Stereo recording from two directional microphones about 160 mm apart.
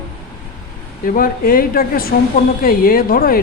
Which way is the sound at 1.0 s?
60° left (ahead or behind).